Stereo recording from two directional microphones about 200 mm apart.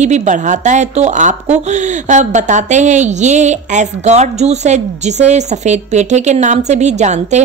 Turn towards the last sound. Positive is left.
turn(degrees=-35)  # may be behind; listen again after turning